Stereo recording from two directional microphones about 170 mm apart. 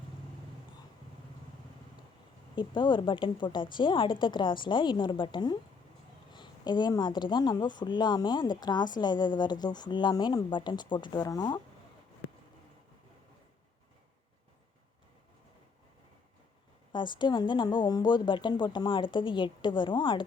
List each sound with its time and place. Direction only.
2.6 s speech: 30° left (ahead or behind)
16.9 s speech: 25° left (ahead or behind)